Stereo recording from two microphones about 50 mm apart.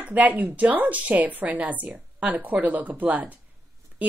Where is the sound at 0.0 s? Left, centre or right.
Right.